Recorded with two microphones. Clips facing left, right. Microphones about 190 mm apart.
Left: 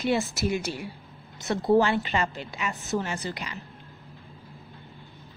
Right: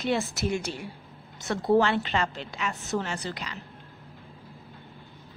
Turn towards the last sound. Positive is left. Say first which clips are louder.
# left 1 dB
turn(degrees=10)  # may be behind; listen again after turning